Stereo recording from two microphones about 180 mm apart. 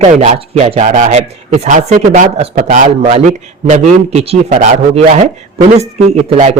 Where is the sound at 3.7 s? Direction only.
35° right (ahead or behind).